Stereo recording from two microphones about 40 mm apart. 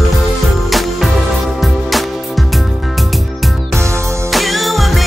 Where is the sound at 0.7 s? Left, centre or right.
Centre.